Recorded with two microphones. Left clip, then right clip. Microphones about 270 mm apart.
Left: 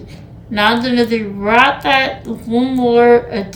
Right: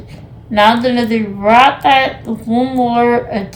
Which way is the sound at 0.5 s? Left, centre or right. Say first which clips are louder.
Right 3 dB; centre.